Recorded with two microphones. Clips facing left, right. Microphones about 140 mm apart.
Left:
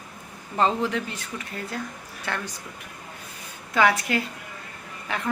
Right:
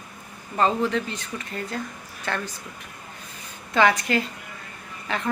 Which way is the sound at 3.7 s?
5° left (ahead or behind).